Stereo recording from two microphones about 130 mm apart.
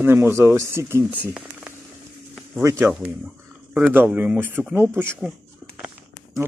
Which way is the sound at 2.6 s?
25° right (ahead or behind).